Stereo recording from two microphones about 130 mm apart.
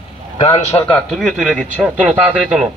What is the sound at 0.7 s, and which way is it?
Speech, 15° left (ahead or behind).